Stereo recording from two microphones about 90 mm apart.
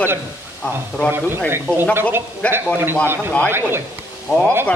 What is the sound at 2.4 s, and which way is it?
Speech, 15° left (ahead or behind).